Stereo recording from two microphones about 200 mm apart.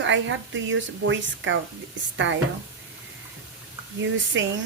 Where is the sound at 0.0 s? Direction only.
70° right (ahead or behind).